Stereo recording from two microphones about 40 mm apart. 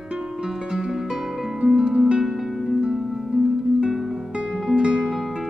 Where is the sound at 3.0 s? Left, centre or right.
Centre.